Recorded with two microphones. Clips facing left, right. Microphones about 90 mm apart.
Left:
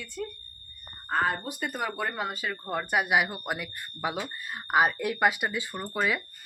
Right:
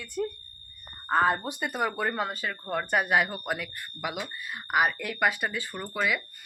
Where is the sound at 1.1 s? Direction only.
25° right (ahead or behind).